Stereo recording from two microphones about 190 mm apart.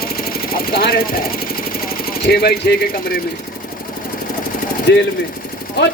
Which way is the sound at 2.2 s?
55° left (ahead or behind).